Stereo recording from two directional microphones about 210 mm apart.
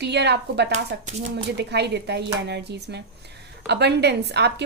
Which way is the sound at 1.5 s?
50° right (ahead or behind).